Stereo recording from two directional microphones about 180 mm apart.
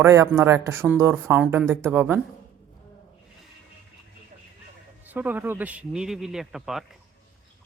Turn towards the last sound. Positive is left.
turn(degrees=0)  # may be behind; listen again after turning